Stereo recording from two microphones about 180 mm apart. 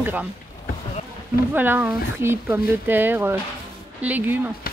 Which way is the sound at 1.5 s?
10° right (ahead or behind).